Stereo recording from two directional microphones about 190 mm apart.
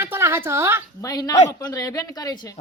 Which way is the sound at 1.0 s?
20° left (ahead or behind).